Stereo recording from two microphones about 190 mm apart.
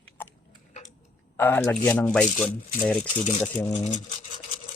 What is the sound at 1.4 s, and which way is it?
Speech, 10° left (ahead or behind).